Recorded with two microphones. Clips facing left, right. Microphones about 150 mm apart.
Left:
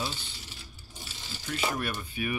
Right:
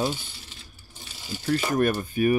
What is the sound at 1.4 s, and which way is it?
Speech, 45° right (ahead or behind).